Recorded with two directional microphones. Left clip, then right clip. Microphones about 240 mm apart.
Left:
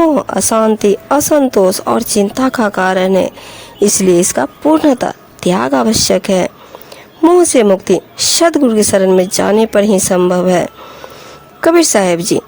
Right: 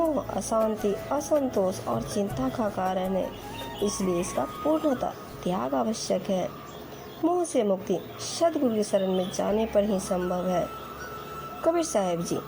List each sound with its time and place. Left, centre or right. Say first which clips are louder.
0.1 s a woman's voice: left 15 dB; left